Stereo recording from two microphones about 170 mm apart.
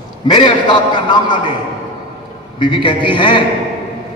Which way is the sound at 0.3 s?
30° left (ahead or behind).